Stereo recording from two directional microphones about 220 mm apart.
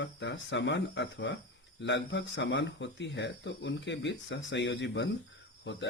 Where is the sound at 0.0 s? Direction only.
55° left (ahead or behind).